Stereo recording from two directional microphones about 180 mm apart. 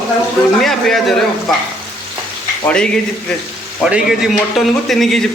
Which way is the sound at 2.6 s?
5° left (ahead or behind).